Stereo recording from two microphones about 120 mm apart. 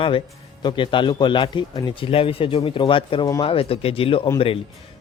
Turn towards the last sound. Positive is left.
turn(degrees=50)  # may be behind; listen again after turning